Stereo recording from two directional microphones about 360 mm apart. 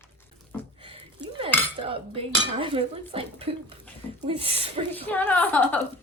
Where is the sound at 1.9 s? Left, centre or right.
Centre.